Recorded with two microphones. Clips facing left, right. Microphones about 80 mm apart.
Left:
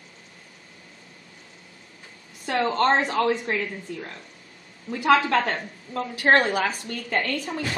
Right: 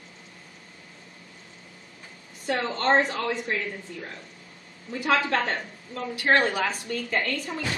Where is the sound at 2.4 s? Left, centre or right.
Left.